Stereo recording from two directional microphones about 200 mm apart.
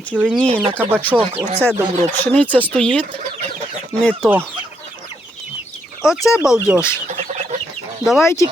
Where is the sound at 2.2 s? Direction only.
5° left (ahead or behind).